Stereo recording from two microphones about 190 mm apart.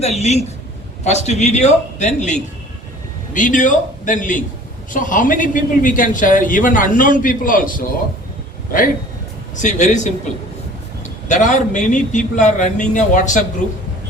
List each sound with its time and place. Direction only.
0.0 s a man's voice: 35° left (ahead or behind)
9.6 s a man's voice: 40° left (ahead or behind)
11.3 s a man's voice: 40° left (ahead or behind)